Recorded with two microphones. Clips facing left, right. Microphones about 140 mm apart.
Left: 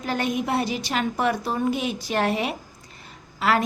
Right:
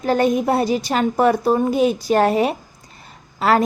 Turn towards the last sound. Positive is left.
turn(degrees=-40)  # may be behind; listen again after turning